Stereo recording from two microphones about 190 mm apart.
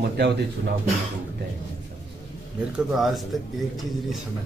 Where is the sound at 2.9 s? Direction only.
Centre (ahead or behind).